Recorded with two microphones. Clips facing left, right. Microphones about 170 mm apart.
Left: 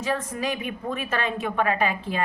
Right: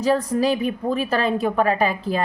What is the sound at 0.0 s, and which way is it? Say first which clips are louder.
A woman's voice: right 8 dB; 35° right (ahead or behind).